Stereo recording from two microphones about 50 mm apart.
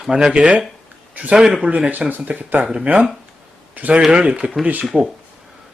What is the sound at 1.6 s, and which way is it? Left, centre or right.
Speech, right.